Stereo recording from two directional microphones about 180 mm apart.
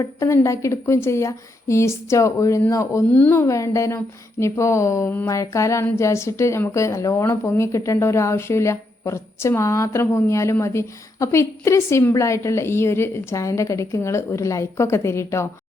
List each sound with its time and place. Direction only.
0.0 s a woman's voice: 15° left (ahead or behind)